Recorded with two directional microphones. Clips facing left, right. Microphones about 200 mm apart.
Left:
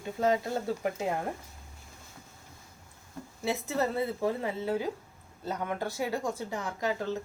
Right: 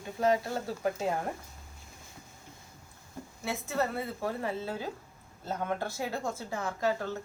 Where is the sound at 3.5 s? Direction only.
20° left (ahead or behind).